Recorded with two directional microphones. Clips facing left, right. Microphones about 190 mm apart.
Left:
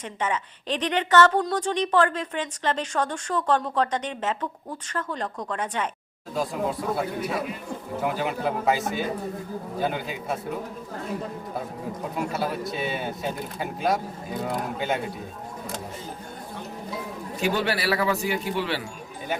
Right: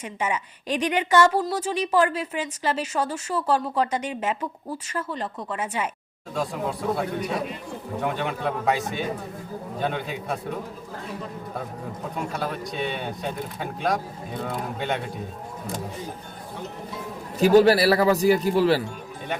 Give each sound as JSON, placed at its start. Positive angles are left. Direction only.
{"t": 0.0, "sound": "a woman's voice", "side_deg": -10}
{"t": 12.1, "sound": "speech", "side_deg": 5}
{"t": 17.4, "sound": "a man's voice", "side_deg": -40}